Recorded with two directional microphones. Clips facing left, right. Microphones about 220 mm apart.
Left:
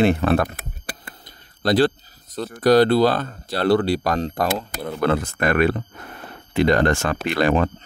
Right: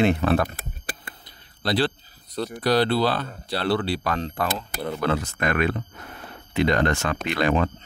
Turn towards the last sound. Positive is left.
turn(degrees=45)  # may be behind; listen again after turning